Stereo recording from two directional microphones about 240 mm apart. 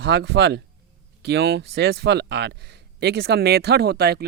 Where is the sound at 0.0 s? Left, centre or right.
Right.